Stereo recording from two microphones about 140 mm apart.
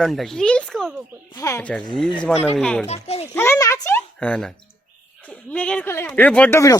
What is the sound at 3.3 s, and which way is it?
Speech, 20° left (ahead or behind).